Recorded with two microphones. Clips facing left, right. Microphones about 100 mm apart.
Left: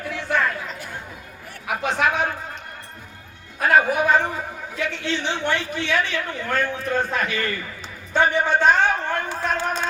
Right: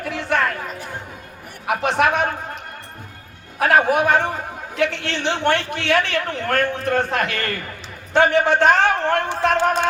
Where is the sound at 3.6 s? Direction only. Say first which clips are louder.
Right 2 dB; 65° right (ahead or behind).